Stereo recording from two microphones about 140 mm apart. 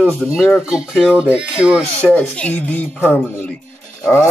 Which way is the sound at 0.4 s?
Centre (ahead or behind).